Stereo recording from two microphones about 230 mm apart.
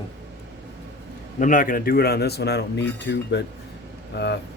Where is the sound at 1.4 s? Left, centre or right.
Left.